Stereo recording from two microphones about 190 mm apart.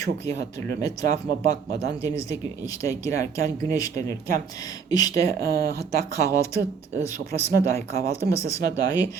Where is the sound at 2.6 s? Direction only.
20° left (ahead or behind).